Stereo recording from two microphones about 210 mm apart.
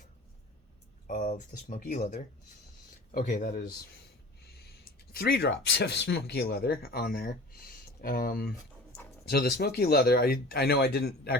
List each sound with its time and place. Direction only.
1.0 s speech: 35° left (ahead or behind)
5.1 s speech: 45° left (ahead or behind)